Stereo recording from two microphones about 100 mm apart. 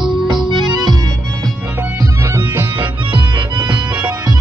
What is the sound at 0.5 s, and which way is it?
Music, 45° right (ahead or behind).